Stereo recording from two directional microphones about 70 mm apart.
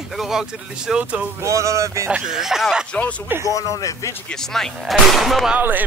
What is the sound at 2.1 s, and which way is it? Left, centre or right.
Speech, centre.